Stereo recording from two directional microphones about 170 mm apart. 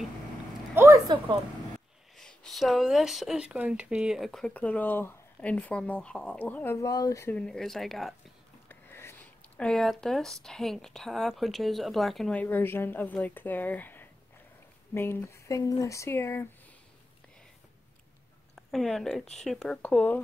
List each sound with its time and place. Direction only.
0.7 s a sound: 15° right (ahead or behind)
2.1 s speech: 5° left (ahead or behind)
8.6 s speech: 15° left (ahead or behind)
18.5 s speech: centre (ahead or behind)